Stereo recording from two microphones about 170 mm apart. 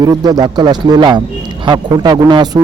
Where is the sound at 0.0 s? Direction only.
20° right (ahead or behind).